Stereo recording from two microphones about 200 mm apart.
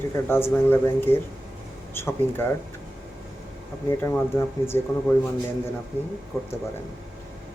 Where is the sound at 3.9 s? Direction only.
15° left (ahead or behind).